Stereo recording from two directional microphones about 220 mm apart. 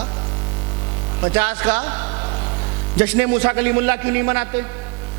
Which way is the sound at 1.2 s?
15° right (ahead or behind).